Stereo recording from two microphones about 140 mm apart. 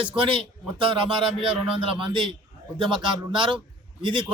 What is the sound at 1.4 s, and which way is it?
A man's voice, 40° right (ahead or behind).